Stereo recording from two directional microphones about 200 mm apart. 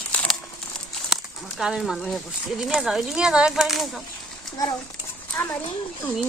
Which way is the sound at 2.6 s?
Centre (ahead or behind).